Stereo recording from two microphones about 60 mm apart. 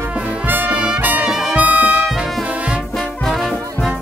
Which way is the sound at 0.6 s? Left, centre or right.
Centre.